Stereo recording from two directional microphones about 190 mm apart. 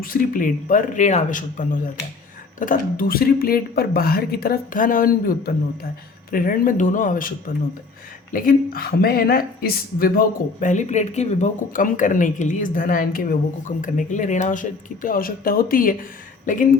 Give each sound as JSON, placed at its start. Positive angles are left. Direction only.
{"t": 0.0, "sound": "speech", "side_deg": 45}